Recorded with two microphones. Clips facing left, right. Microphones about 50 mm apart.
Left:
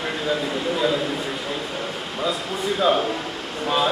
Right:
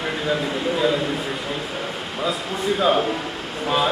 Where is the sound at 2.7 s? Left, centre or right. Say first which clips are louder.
Even; centre.